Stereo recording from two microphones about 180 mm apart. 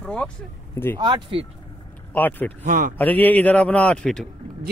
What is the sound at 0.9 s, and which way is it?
Speech, 25° right (ahead or behind).